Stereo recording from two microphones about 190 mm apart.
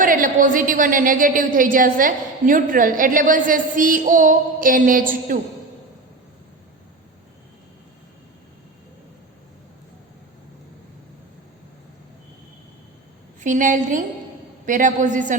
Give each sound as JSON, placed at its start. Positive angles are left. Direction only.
{"t": 0.0, "sound": "a woman's voice", "side_deg": -45}
{"t": 13.4, "sound": "a woman's voice", "side_deg": -40}